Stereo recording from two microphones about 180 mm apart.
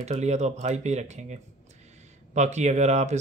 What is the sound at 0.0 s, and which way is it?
Speech, 40° right (ahead or behind).